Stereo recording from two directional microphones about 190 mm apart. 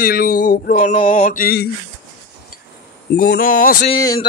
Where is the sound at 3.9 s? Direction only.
25° left (ahead or behind).